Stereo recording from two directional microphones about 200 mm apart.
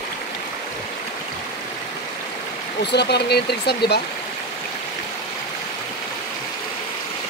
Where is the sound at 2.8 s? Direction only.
55° left (ahead or behind).